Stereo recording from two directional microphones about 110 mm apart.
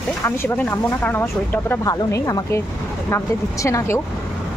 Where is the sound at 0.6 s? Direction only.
15° left (ahead or behind).